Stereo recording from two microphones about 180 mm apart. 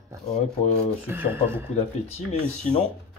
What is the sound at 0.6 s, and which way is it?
Speech, 35° left (ahead or behind).